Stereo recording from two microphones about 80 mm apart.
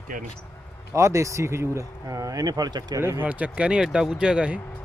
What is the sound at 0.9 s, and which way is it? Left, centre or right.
Speech, right.